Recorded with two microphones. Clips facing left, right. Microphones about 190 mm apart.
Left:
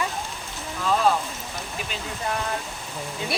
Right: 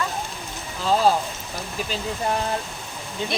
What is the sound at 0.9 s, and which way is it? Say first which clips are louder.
Speech: right 2 dB; 30° right (ahead or behind).